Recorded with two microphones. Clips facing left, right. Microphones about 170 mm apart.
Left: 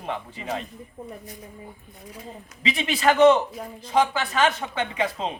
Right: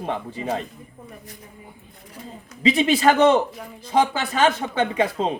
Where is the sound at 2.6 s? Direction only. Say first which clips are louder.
Right 7 dB; 35° right (ahead or behind).